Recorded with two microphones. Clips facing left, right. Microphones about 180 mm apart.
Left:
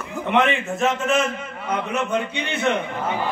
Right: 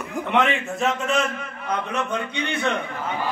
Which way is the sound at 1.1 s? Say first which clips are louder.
Left 2 dB; 20° left (ahead or behind).